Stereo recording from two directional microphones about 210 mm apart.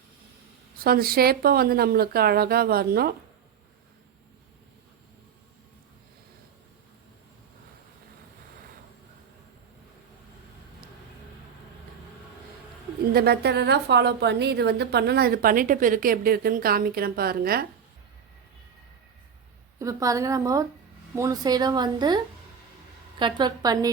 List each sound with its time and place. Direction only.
0.9 s a woman's voice: 45° right (ahead or behind)
13.1 s a woman's voice: 50° right (ahead or behind)
19.8 s a woman's voice: 15° right (ahead or behind)